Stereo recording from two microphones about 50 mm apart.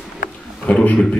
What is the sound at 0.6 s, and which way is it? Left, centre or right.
Speech, left.